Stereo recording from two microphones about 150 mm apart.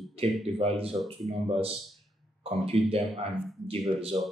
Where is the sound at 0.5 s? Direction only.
40° right (ahead or behind).